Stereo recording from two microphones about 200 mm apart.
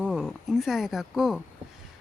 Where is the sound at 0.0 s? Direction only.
5° right (ahead or behind).